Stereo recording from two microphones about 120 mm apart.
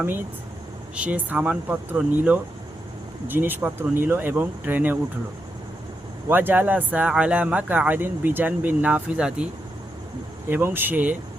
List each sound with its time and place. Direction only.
0.9 s speech: 15° right (ahead or behind)
6.2 s speech: 15° right (ahead or behind)
10.5 s speech: 20° right (ahead or behind)